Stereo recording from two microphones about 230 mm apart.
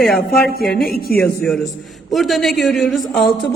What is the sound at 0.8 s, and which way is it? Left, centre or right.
Speech, left.